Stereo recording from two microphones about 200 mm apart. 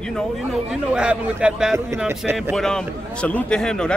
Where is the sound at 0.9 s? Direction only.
5° right (ahead or behind).